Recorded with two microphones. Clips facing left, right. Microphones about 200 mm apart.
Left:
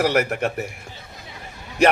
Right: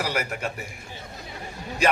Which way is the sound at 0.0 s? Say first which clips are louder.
Left 8 dB; 50° left (ahead or behind).